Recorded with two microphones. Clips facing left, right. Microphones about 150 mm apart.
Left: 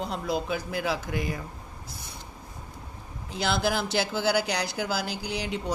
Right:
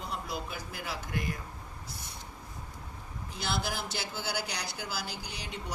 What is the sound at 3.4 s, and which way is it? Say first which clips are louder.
Speech: left 8 dB; 90° left.